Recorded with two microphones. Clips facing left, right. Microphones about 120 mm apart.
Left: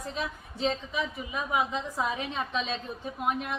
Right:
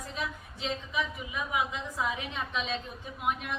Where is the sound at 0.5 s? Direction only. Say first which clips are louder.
Left 4 dB; 40° left (ahead or behind).